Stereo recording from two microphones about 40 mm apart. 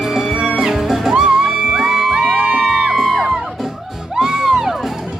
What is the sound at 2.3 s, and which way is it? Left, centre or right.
Music, right.